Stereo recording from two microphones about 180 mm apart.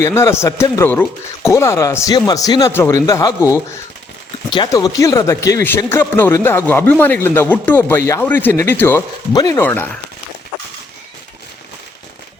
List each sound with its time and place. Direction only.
0.0 s speech: 15° left (ahead or behind)